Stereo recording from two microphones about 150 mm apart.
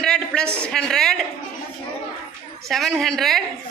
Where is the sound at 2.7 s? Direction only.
Centre (ahead or behind).